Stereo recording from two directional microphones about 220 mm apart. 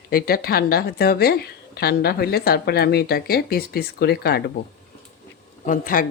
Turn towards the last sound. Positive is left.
turn(degrees=40)  # may be behind; listen again after turning